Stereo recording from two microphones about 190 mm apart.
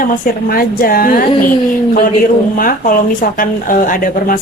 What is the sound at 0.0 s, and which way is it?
Speech, 50° left (ahead or behind).